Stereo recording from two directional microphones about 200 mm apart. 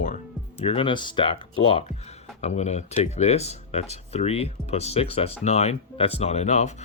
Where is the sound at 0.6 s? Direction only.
30° left (ahead or behind).